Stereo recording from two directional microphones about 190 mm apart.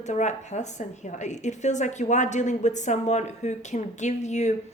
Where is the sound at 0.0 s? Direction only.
40° left (ahead or behind).